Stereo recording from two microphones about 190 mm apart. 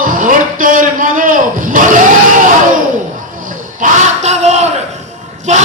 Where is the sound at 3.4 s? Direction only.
45° right (ahead or behind).